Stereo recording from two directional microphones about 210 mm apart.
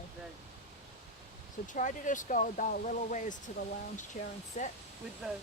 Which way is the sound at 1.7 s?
35° left (ahead or behind).